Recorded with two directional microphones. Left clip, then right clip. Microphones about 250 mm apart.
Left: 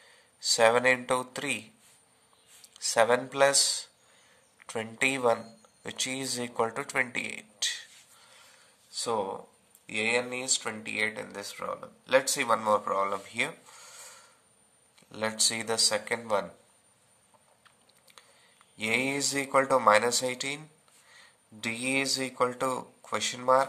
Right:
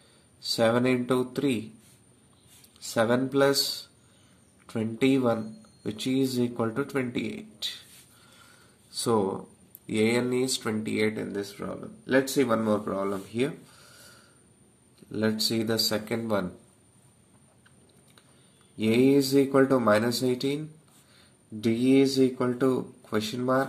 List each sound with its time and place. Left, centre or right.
0.4 s speech: left
2.7 s speech: left
4.6 s speech: left
8.9 s speech: centre; by 13.9 s left
15.0 s speech: left
18.8 s speech: left